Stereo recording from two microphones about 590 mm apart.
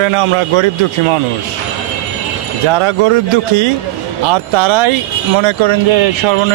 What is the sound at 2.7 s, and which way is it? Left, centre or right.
Speech, right.